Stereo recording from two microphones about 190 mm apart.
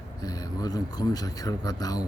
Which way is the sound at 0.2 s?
20° left (ahead or behind).